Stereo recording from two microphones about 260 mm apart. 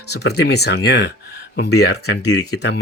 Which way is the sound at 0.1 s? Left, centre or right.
Left.